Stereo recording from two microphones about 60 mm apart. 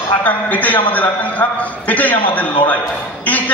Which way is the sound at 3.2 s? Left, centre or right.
Left.